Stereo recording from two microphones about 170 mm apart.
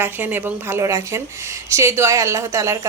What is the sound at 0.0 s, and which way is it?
Speech, 10° right (ahead or behind).